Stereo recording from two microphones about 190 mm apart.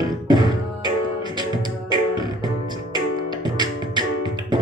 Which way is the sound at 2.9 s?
20° right (ahead or behind).